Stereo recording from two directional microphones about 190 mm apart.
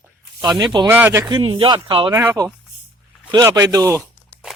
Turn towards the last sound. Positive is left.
turn(degrees=-15)  # may be behind; listen again after turning